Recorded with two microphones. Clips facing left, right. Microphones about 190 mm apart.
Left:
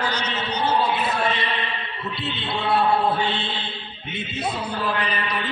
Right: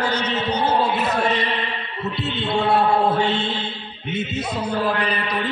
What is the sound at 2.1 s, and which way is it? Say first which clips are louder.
Music: right 6 dB; 45° right (ahead or behind).